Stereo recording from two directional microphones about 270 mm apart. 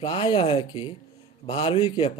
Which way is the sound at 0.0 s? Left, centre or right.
Centre.